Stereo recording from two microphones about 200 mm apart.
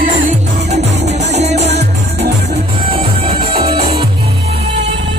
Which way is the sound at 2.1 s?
55° right (ahead or behind).